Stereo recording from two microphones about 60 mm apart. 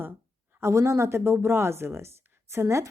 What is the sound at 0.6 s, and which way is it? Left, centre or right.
A woman's voice, right.